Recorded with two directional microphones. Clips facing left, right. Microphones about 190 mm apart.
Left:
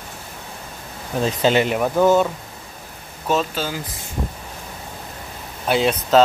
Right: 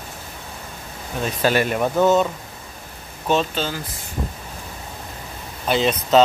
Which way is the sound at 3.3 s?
5° left (ahead or behind).